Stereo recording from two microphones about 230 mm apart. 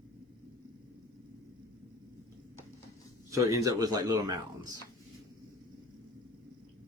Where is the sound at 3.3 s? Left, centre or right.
Centre.